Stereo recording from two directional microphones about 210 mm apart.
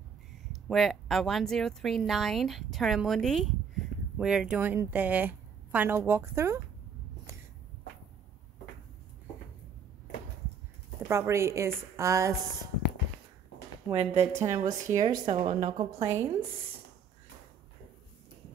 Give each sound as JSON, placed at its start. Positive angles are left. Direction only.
{"t": 0.7, "sound": "a woman's voice", "side_deg": 0}
{"t": 11.1, "sound": "a woman's voice", "side_deg": -15}
{"t": 13.8, "sound": "speech", "side_deg": -30}
{"t": 14.4, "sound": "a woman's voice", "side_deg": -15}